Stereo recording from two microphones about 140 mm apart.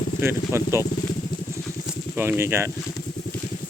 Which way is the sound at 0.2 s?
20° right (ahead or behind).